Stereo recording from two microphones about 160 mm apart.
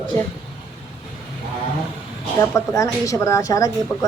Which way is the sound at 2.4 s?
20° left (ahead or behind).